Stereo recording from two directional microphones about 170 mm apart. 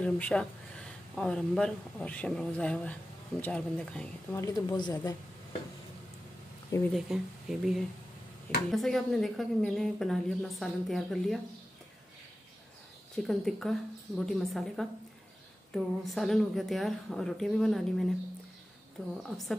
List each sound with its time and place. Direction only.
0.0 s speech: 5° left (ahead or behind)
4.4 s speech: 20° left (ahead or behind)
6.9 s speech: centre (ahead or behind)
13.1 s speech: centre (ahead or behind)